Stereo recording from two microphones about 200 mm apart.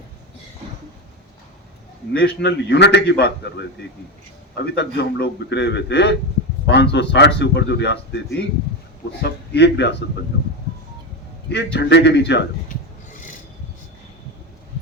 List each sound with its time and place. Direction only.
2.1 s a man's voice: 60° left (ahead or behind)
4.5 s a man's voice: 55° left (ahead or behind)
11.4 s a man's voice: 60° left (ahead or behind)